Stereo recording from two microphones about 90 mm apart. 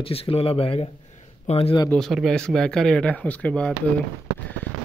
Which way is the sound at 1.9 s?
15° left (ahead or behind).